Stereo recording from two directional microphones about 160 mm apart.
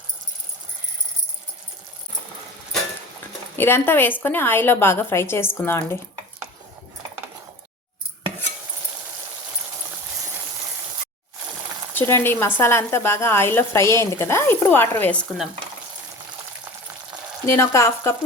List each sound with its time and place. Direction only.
3.6 s a woman's voice: 15° left (ahead or behind)
11.9 s a woman's voice: 15° left (ahead or behind)
17.4 s a woman's voice: 15° left (ahead or behind)